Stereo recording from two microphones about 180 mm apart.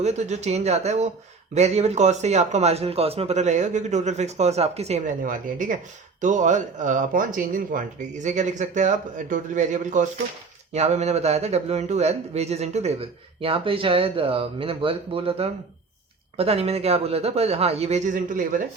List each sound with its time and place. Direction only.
0.0 s speech: 40° right (ahead or behind)